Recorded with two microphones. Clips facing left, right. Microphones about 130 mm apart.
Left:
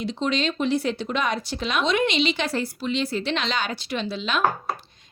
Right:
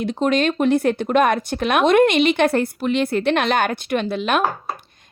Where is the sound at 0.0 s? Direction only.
55° right (ahead or behind).